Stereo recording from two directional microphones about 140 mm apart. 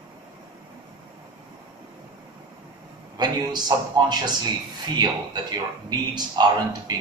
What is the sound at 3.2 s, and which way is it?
A man's voice, 30° right (ahead or behind).